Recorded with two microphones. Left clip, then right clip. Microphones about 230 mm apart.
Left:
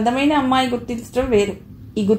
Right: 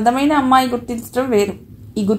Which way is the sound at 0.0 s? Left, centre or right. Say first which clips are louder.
Right 3 dB; right.